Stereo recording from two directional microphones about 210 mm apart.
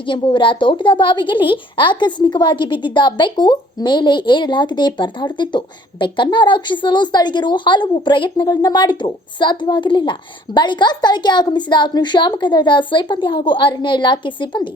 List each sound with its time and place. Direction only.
0.0 s a woman's voice: 20° left (ahead or behind)